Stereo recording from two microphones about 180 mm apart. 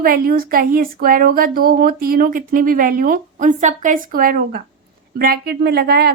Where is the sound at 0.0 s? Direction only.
55° right (ahead or behind).